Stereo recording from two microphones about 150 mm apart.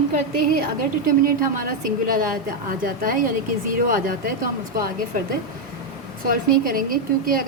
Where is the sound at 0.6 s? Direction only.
70° right (ahead or behind).